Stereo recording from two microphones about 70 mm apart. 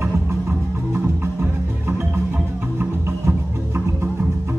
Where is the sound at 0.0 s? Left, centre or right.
Right.